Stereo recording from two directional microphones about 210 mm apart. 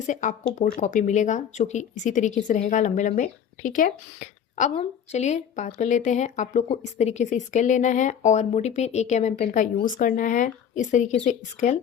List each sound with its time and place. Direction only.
0.1 s speech: 35° left (ahead or behind)